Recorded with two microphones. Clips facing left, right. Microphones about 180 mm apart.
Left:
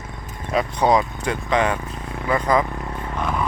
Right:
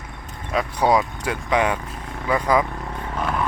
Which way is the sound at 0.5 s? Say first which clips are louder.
Left 1 dB; 5° right (ahead or behind).